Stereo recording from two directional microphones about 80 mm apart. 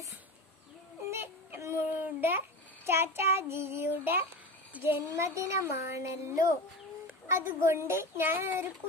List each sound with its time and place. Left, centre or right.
1.1 s child singing: right
2.0 s babbling: right
2.8 s child singing: right
4.8 s speech: right